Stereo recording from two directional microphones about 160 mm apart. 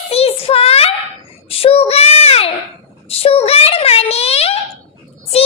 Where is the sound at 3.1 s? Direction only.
35° left (ahead or behind).